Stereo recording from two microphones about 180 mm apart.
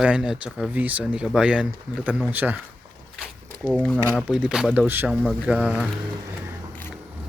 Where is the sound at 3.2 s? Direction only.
5° right (ahead or behind).